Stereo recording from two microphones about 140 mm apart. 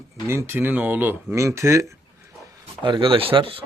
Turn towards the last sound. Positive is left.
turn(degrees=-40)  # may be behind; listen again after turning